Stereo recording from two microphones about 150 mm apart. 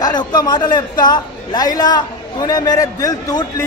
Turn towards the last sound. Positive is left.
turn(degrees=25)  # may be behind; listen again after turning